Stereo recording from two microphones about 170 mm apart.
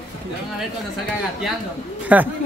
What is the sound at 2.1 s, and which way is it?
Speech, 10° right (ahead or behind).